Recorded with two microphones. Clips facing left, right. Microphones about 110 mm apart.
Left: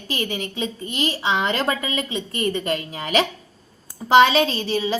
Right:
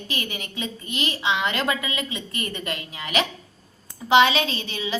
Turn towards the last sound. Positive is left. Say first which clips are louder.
# left 7 dB
turn(degrees=35)  # may be behind; listen again after turning